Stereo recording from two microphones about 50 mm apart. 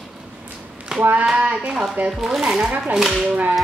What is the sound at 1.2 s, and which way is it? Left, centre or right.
Speech, centre.